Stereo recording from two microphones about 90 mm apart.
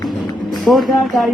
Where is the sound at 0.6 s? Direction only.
Centre (ahead or behind).